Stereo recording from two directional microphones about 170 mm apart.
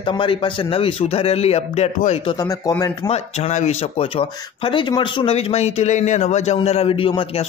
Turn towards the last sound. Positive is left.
turn(degrees=35)  # may be behind; listen again after turning